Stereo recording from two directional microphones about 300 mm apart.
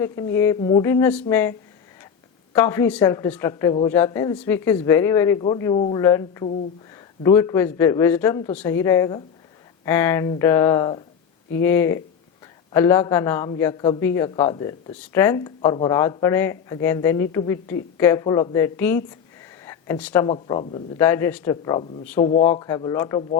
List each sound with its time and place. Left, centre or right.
0.0 s speech: centre
19.6 s a sound: centre
20.2 s speech: centre
22.2 s speech: left